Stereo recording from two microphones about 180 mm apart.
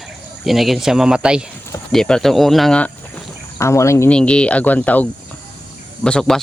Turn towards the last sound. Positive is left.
turn(degrees=5)  # may be behind; listen again after turning